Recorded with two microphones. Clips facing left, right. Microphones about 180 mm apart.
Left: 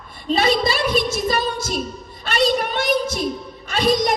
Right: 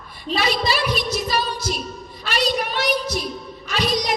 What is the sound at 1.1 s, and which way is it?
Music, 50° left (ahead or behind).